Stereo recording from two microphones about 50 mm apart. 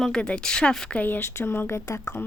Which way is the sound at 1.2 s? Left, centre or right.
Left.